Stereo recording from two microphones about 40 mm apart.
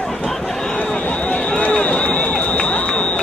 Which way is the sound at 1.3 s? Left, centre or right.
Left.